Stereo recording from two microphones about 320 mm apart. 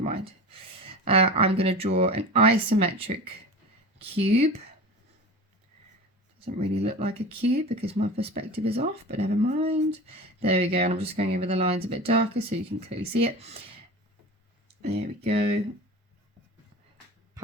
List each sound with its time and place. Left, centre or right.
0.9 s speech: centre
6.7 s speech: centre
14.8 s speech: right